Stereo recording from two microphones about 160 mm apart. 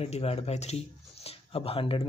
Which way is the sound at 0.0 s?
40° left (ahead or behind).